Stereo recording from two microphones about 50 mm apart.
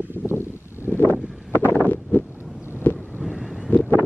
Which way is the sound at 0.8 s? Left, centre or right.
Left.